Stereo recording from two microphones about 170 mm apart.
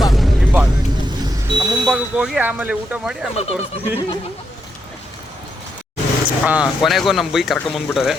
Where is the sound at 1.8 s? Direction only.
5° right (ahead or behind).